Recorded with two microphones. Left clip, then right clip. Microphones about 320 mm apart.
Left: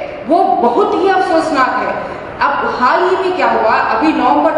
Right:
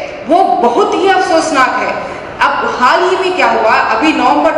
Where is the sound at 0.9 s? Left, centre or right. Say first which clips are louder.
Right 2 dB; centre.